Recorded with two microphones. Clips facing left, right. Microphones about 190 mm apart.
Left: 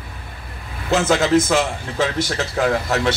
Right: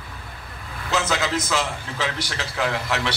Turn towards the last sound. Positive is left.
turn(degrees=45)  # may be behind; listen again after turning